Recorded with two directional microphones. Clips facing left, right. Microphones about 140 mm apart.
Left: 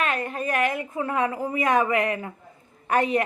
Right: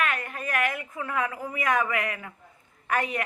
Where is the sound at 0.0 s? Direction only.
25° left (ahead or behind).